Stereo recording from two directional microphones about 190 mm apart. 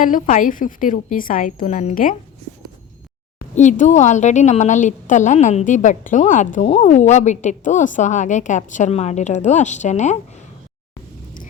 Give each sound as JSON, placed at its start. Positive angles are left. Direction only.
{"t": 0.0, "sound": "a woman's voice", "side_deg": 45}
{"t": 3.5, "sound": "a woman's voice", "side_deg": 40}